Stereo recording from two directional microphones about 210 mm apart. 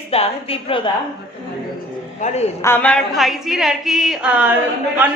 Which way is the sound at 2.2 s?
30° left (ahead or behind).